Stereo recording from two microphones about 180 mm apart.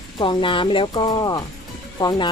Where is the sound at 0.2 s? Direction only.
25° left (ahead or behind).